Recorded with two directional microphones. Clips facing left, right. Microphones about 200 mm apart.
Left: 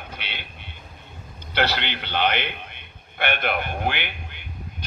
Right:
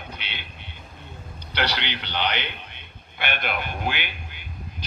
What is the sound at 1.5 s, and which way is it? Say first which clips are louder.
A man's voice: left 3 dB; 50° left (ahead or behind).